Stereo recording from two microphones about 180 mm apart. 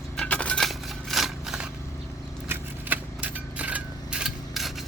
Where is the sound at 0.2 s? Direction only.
5° left (ahead or behind).